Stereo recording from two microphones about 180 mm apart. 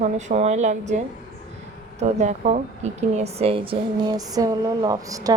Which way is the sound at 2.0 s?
40° right (ahead or behind).